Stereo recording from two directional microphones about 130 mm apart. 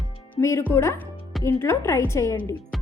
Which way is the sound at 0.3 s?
20° left (ahead or behind).